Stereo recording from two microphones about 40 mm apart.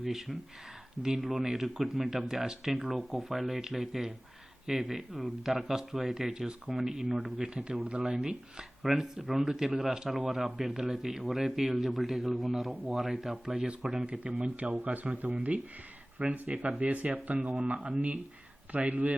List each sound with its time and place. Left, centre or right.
0.0 s speech: centre
8.8 s a man's voice: centre
14.4 s speech: right